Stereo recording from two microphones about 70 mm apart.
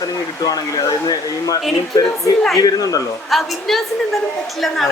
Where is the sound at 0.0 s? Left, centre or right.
Left.